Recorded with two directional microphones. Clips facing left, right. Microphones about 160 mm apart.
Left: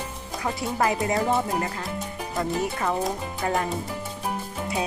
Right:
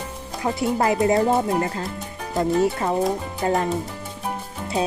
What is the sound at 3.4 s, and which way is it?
Speech, 30° right (ahead or behind).